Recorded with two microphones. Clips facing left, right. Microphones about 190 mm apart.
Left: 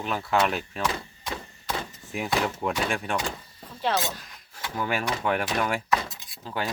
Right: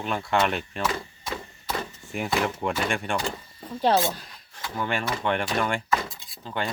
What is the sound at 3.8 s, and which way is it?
Speech, 35° right (ahead or behind).